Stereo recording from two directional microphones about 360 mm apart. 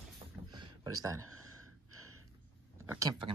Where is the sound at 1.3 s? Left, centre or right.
Right.